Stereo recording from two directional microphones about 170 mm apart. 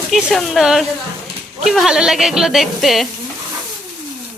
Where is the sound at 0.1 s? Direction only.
Centre (ahead or behind).